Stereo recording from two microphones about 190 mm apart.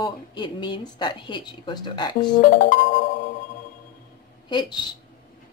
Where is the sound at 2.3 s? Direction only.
45° left (ahead or behind).